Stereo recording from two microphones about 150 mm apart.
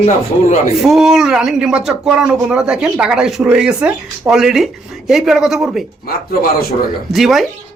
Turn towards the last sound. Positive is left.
turn(degrees=0)  # may be behind; listen again after turning